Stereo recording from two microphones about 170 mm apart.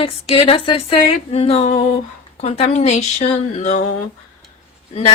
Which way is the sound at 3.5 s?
40° left (ahead or behind).